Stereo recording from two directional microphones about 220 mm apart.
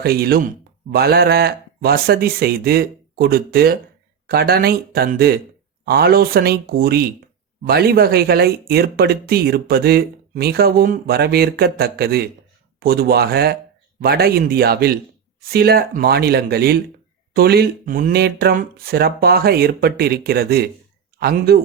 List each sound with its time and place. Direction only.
0.0 s speech: 45° right (ahead or behind)